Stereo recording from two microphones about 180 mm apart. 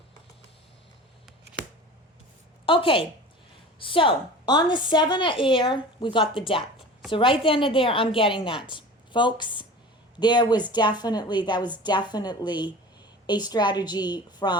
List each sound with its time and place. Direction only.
2.6 s a woman's voice: 30° left (ahead or behind)